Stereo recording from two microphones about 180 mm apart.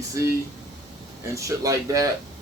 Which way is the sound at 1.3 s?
20° right (ahead or behind).